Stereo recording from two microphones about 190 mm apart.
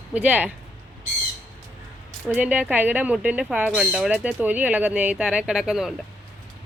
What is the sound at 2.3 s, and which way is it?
Speech, 10° right (ahead or behind).